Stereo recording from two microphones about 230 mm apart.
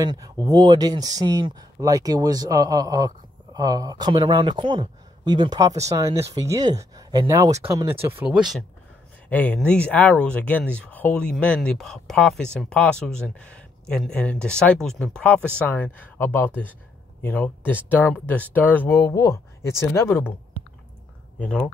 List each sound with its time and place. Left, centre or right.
0.0 s speech: centre
21.4 s speech: centre